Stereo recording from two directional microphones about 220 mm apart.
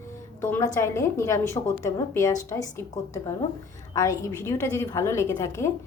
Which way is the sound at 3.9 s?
15° left (ahead or behind).